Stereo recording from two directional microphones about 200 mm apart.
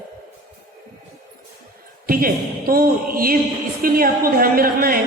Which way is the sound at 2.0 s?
45° right (ahead or behind).